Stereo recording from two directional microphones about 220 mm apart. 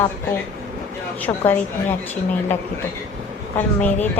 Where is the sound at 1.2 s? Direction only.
10° left (ahead or behind).